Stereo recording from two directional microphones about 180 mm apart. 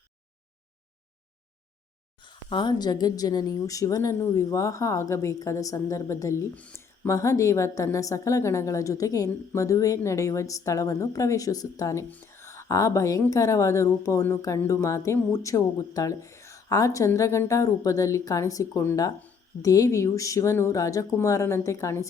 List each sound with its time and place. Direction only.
2.2 s a woman's voice: 25° left (ahead or behind)